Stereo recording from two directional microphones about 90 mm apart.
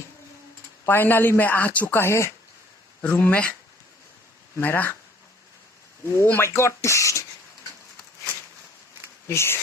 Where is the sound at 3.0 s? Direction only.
20° left (ahead or behind).